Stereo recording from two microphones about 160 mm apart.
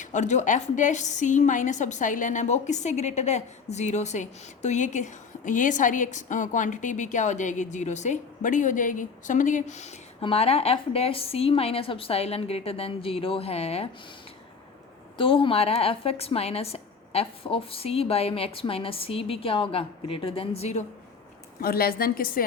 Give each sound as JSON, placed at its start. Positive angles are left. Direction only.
{"t": 0.0, "sound": "a woman's voice", "side_deg": 50}
{"t": 15.2, "sound": "a woman's voice", "side_deg": 35}
{"t": 21.6, "sound": "a woman's voice", "side_deg": 70}